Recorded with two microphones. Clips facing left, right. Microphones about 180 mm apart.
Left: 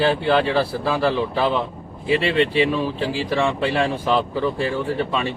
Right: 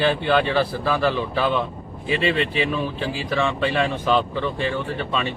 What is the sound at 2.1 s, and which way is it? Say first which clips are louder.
Speech: left 3 dB; 30° left (ahead or behind).